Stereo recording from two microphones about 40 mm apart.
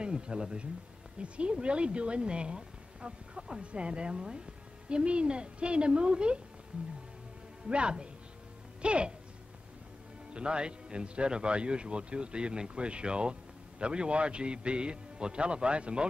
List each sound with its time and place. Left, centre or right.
0.0 s a man's voice: right
7.6 s a man's voice: right
10.3 s a man's voice: right